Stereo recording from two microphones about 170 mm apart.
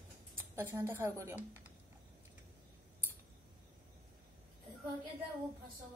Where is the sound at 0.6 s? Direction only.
15° right (ahead or behind).